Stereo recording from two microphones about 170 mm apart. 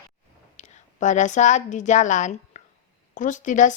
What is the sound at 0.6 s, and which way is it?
A woman's voice, 45° left (ahead or behind).